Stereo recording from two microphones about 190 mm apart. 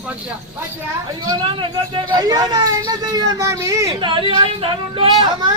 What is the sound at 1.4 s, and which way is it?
Speech, 25° right (ahead or behind).